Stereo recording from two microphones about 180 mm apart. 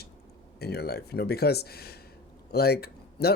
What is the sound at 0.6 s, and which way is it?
Speech, 60° left (ahead or behind).